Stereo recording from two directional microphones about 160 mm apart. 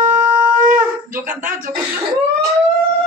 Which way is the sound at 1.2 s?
55° right (ahead or behind).